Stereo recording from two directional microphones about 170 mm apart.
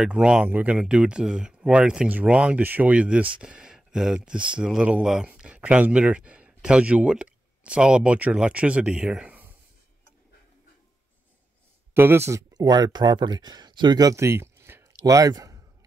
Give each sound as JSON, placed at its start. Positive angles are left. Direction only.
{"t": 0.0, "sound": "speech", "side_deg": -5}
{"t": 11.9, "sound": "speech", "side_deg": -15}